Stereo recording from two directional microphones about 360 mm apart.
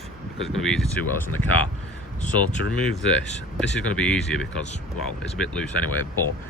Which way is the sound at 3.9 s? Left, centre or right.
Centre.